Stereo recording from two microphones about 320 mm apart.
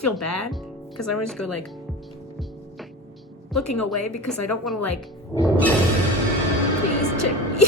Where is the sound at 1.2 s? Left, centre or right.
Centre.